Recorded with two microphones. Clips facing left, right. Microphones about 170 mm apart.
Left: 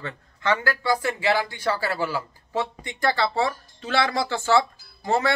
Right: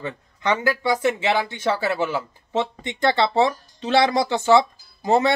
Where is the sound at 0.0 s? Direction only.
20° right (ahead or behind).